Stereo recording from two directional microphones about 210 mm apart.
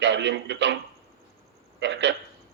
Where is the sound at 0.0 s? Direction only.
55° right (ahead or behind).